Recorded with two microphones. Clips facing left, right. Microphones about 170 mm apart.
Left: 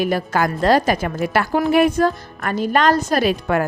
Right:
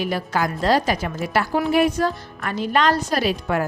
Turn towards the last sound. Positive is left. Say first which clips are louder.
# left 4 dB
turn(degrees=55)  # may be behind; listen again after turning